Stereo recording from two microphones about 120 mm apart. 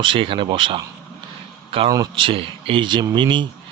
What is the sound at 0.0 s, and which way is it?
Speech, 45° right (ahead or behind).